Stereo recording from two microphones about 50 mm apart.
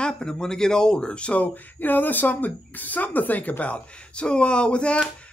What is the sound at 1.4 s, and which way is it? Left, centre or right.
Speech, left.